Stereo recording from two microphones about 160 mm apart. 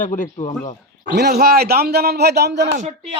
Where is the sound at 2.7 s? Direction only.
40° right (ahead or behind).